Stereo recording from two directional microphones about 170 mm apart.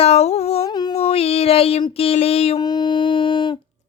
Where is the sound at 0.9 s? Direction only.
35° left (ahead or behind).